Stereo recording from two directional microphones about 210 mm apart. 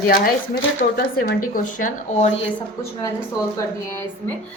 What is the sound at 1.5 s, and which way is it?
Speech, 40° left (ahead or behind).